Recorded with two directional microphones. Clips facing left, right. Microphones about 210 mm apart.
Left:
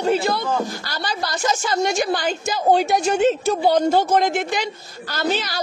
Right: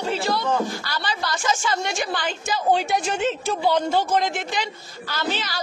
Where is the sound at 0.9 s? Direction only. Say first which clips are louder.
Left 1 dB; 40° left (ahead or behind).